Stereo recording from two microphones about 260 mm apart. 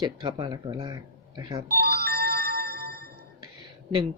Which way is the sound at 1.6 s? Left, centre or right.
Right.